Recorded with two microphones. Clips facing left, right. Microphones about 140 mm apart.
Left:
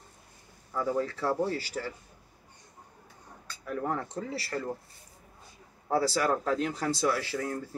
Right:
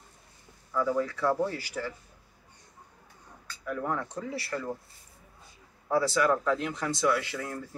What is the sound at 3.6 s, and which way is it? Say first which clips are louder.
Speech: even; 35° left (ahead or behind).